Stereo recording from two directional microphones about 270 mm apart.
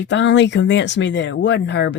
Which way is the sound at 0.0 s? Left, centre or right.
Left.